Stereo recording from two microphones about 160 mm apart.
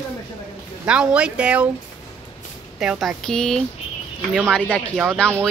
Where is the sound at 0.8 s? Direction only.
5° right (ahead or behind).